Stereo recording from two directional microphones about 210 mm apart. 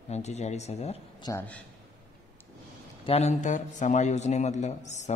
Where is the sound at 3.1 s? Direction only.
30° left (ahead or behind).